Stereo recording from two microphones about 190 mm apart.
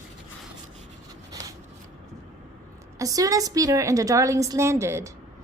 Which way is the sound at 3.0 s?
20° right (ahead or behind).